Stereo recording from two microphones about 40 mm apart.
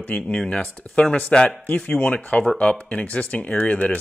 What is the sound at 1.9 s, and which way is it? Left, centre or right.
Speech, left.